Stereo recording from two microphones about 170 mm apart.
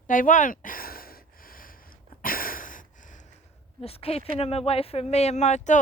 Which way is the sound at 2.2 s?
55° left (ahead or behind).